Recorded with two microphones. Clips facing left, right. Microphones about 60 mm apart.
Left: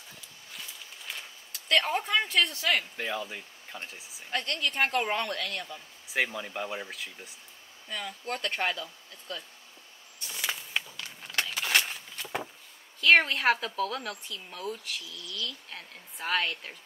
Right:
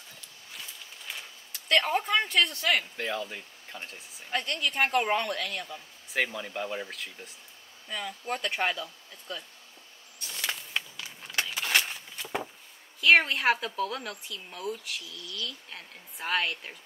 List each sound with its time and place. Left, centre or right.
0.5 s a woman's voice: centre
10.2 s a sound: centre
13.0 s a woman's voice: centre